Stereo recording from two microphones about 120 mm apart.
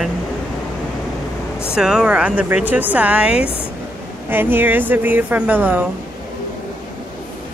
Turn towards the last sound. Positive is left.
turn(degrees=-15)  # may be behind; listen again after turning